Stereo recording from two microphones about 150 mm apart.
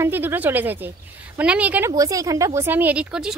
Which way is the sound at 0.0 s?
15° right (ahead or behind).